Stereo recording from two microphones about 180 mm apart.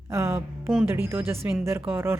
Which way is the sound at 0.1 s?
15° right (ahead or behind).